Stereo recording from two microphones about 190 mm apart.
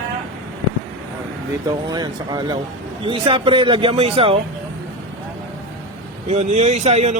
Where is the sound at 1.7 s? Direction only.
20° right (ahead or behind).